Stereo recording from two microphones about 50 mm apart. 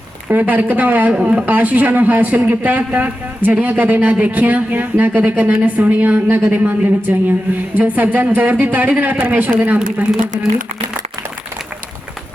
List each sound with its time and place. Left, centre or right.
0.3 s speech: right